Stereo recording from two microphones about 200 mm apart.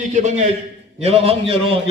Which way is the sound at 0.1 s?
35° right (ahead or behind).